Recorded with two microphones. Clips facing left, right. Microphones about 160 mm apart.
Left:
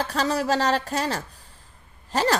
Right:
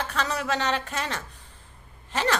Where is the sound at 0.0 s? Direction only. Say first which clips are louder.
Left 5 dB; 35° left (ahead or behind).